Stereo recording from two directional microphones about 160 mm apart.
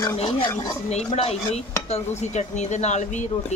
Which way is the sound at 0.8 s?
40° left (ahead or behind).